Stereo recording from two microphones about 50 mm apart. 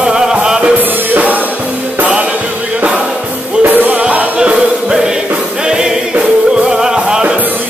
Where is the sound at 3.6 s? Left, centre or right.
Right.